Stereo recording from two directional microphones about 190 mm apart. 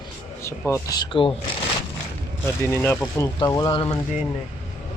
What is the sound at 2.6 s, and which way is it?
Speech, 10° left (ahead or behind).